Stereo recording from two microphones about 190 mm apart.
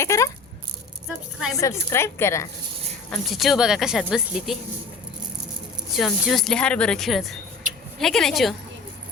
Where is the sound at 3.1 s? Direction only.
Centre (ahead or behind).